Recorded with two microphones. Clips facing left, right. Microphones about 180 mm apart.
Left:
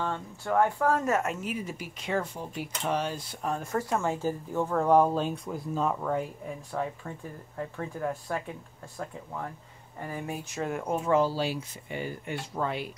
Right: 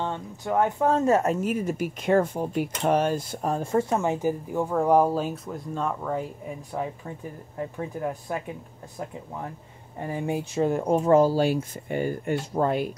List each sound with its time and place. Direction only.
0.0 s speech: 20° right (ahead or behind); by 3.5 s 45° right (ahead or behind)
3.5 s speech: 25° right (ahead or behind); by 6.2 s centre (ahead or behind)
6.8 s speech: 15° right (ahead or behind)
9.9 s speech: 25° right (ahead or behind); by 12.9 s 45° right (ahead or behind)